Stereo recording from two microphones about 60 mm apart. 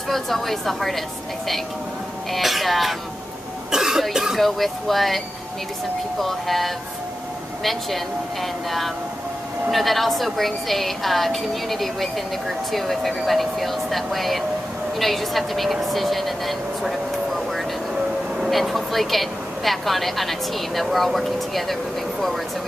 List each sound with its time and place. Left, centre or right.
0.1 s a woman's voice: centre
2.3 s a woman's voice: centre
3.7 s cough: centre
4.1 s speech: centre
4.4 s a woman's voice: centre